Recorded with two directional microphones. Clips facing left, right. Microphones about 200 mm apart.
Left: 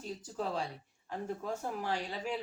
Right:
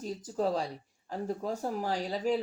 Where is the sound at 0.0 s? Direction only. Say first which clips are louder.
Right 7 dB; 40° right (ahead or behind).